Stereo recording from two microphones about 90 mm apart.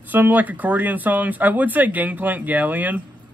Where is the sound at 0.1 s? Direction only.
20° right (ahead or behind).